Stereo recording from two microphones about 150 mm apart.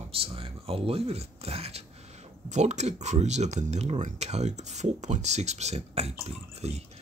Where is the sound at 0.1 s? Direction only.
40° right (ahead or behind).